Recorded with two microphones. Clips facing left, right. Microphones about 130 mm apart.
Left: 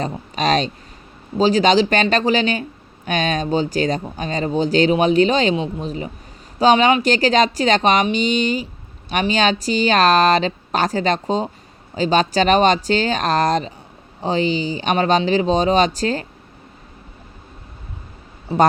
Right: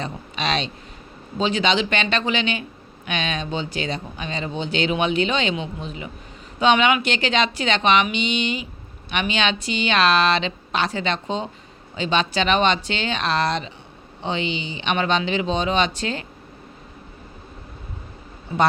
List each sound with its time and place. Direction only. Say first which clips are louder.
0.0 s speech: left 6 dB; 40° left (ahead or behind)
18.5 s speech: left 5 dB; 30° left (ahead or behind)